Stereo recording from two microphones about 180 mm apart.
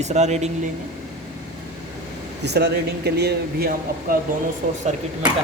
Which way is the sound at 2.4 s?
65° right (ahead or behind).